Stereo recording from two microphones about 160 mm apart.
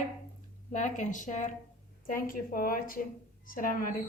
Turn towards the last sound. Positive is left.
turn(degrees=60)  # may be behind; listen again after turning